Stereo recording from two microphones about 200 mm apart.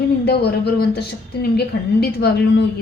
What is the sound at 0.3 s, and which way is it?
A woman's voice, 55° left (ahead or behind).